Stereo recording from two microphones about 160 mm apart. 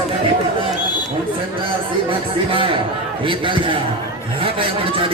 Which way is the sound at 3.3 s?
30° right (ahead or behind).